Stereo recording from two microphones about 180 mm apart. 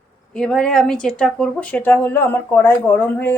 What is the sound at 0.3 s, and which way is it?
A woman's voice, 5° left (ahead or behind).